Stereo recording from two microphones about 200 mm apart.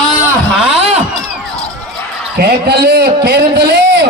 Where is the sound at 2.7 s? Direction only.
55° right (ahead or behind).